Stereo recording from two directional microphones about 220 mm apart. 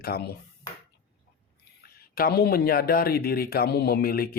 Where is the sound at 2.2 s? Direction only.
45° left (ahead or behind).